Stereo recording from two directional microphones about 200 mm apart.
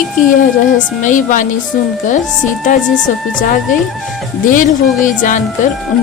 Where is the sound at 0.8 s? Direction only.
40° left (ahead or behind).